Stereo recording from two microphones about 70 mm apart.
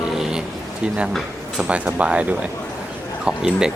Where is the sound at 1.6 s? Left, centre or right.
Centre.